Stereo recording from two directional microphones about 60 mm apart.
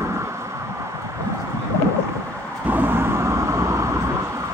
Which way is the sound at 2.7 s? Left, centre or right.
Right.